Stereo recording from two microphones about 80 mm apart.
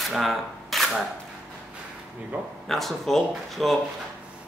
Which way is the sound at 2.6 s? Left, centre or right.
Centre.